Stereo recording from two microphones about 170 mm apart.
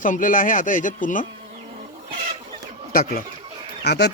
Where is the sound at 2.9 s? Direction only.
60° left (ahead or behind).